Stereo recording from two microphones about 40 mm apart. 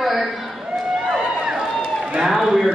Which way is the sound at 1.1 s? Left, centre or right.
Right.